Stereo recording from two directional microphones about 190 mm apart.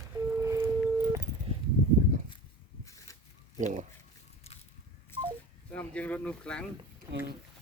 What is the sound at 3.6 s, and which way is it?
Speech, 40° right (ahead or behind).